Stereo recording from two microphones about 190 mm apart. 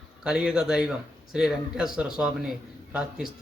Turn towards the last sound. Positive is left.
turn(degrees=0)  # may be behind; listen again after turning